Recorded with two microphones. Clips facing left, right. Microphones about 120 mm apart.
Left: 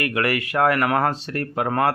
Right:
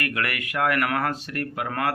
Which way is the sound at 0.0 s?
30° left (ahead or behind).